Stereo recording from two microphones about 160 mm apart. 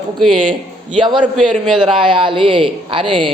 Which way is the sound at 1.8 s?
30° right (ahead or behind).